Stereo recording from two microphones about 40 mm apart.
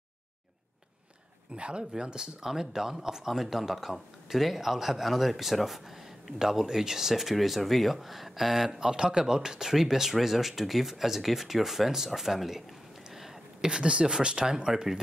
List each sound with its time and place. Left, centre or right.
1.5 s speech: right; by 12.6 s centre
13.1 s a sound: centre
13.7 s speech: right